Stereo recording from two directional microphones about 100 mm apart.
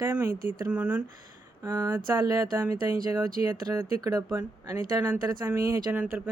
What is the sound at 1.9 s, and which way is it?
Speech, 35° right (ahead or behind).